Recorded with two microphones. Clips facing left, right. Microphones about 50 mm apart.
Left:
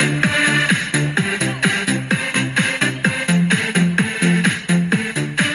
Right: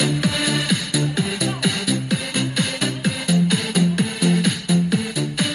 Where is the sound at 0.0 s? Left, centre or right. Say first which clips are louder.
Left 5 dB; left.